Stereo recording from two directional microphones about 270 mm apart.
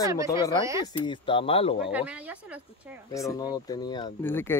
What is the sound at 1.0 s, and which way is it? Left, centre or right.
Speech, centre.